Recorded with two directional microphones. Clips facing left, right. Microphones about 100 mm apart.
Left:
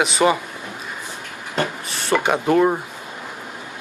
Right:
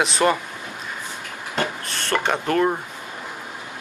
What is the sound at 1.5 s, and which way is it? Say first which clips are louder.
Speech: left 2 dB; 5° left (ahead or behind).